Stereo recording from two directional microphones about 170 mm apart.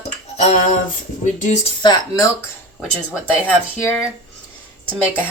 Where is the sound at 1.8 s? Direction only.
25° left (ahead or behind).